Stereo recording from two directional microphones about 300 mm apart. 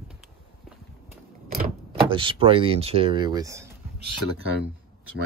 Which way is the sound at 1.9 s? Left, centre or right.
Centre.